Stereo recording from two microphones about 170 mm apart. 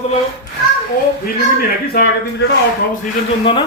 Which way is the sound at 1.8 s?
65° left (ahead or behind).